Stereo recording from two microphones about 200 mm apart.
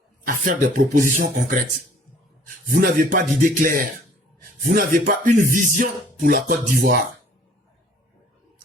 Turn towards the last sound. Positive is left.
turn(degrees=-45)  # may be behind; listen again after turning